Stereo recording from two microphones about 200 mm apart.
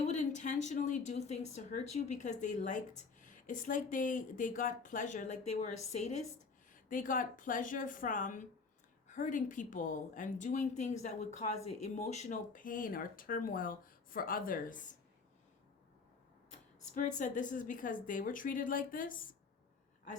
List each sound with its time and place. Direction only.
0.0 s speech: 35° left (ahead or behind)
16.9 s speech: 40° left (ahead or behind)